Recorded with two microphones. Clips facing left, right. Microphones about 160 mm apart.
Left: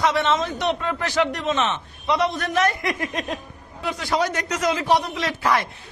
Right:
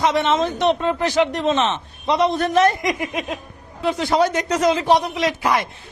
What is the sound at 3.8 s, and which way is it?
A man's voice, 25° right (ahead or behind).